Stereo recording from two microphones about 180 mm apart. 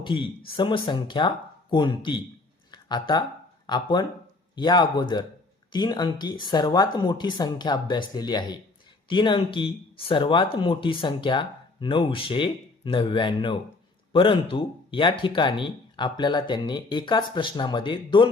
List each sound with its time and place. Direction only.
0.0 s speech: 25° left (ahead or behind)